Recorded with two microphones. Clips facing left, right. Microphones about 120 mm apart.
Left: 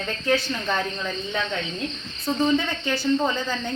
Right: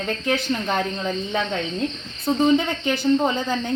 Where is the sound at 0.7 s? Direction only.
35° right (ahead or behind).